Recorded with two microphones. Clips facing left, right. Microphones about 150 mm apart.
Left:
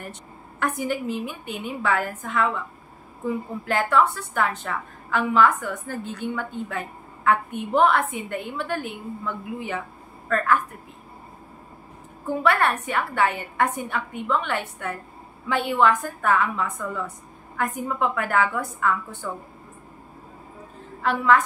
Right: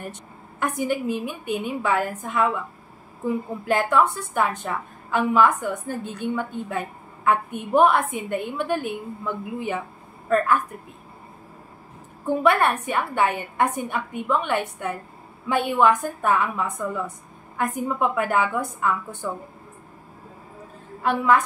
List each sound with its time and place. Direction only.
0.6 s a woman's voice: 15° right (ahead or behind)
3.6 s a woman's voice: 15° right (ahead or behind)
12.4 s a woman's voice: 20° right (ahead or behind)
21.0 s a woman's voice: 15° right (ahead or behind)